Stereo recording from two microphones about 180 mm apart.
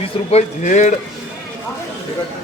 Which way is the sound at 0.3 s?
40° left (ahead or behind).